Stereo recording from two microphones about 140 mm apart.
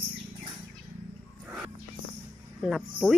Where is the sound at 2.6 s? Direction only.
Centre (ahead or behind).